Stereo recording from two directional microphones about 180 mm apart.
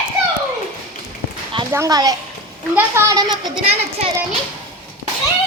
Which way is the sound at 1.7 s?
20° right (ahead or behind).